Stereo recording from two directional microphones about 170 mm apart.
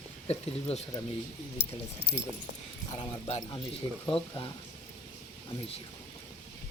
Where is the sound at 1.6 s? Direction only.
80° left.